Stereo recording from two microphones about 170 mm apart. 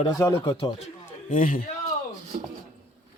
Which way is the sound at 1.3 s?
50° left (ahead or behind).